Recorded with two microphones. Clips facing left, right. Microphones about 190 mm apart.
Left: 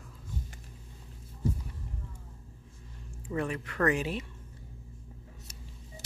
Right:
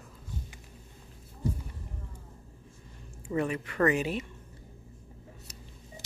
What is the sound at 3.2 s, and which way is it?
Speech, 5° right (ahead or behind).